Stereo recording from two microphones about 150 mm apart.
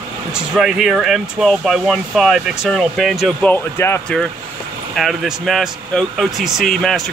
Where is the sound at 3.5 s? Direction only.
15° left (ahead or behind).